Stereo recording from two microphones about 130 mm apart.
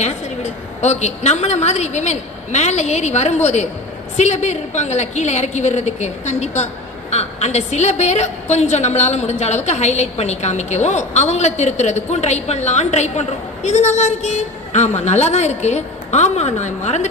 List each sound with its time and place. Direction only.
0.0 s a woman's voice: 60° left (ahead or behind)